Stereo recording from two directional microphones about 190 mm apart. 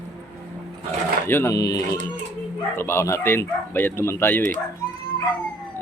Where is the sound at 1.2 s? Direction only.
15° left (ahead or behind).